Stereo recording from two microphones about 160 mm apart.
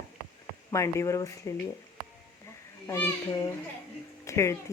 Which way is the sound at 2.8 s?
20° left (ahead or behind).